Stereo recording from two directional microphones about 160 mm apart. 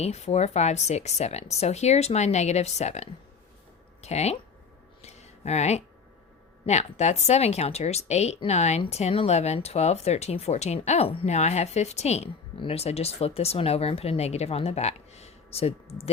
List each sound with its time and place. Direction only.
0.0 s speech: 40° left (ahead or behind)
5.0 s a sound: 45° left (ahead or behind)
6.7 s speech: 45° left (ahead or behind)